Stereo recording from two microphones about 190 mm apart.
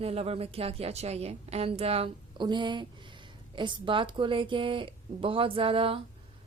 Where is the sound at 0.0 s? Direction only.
30° right (ahead or behind).